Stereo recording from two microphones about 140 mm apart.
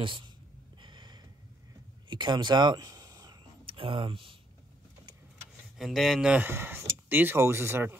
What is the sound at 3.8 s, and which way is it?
Speech, 40° right (ahead or behind).